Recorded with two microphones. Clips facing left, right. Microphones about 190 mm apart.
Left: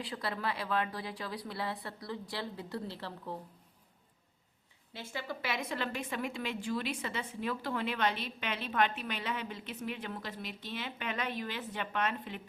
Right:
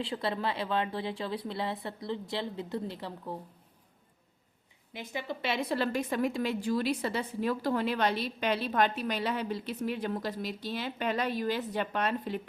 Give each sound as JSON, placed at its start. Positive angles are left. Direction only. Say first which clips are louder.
{"t": 0.0, "sound": "speech", "louder": "right 5 dB", "side_deg": -25}
{"t": 4.9, "sound": "a woman's voice", "louder": "right 4 dB", "side_deg": -20}